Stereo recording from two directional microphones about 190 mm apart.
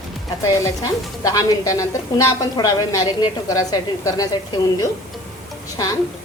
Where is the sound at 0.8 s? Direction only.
20° left (ahead or behind).